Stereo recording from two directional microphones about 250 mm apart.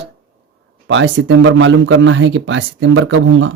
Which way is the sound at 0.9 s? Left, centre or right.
Right.